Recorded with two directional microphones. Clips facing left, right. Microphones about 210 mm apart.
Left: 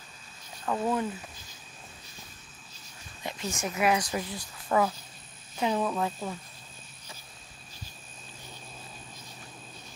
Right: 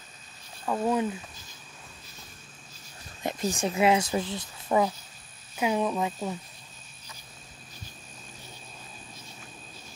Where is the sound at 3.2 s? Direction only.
40° right (ahead or behind); by 6.3 s 15° right (ahead or behind).